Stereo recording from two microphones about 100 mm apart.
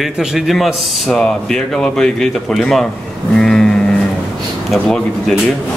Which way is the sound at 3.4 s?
5° left (ahead or behind).